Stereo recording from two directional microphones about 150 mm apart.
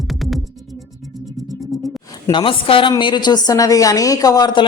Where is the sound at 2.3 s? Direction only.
35° left (ahead or behind).